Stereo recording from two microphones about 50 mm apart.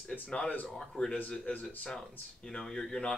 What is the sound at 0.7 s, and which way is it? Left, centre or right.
Speech, centre.